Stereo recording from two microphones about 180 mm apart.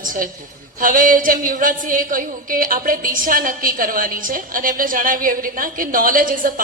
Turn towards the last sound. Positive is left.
turn(degrees=-50)  # may be behind; listen again after turning